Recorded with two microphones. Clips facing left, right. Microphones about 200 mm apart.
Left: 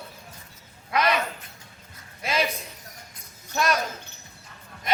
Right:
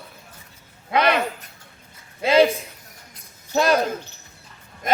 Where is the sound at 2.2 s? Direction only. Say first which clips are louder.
Right 11 dB; 30° right (ahead or behind).